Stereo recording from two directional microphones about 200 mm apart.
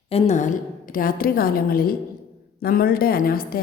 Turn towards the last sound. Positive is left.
turn(degrees=45)  # may be behind; listen again after turning